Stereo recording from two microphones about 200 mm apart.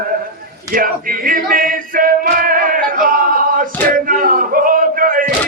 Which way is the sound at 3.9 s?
45° right (ahead or behind).